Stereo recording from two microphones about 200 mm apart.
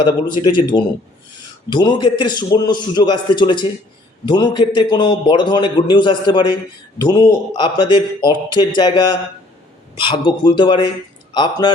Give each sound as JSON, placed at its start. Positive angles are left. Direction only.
{"t": 0.0, "sound": "a man's voice", "side_deg": 25}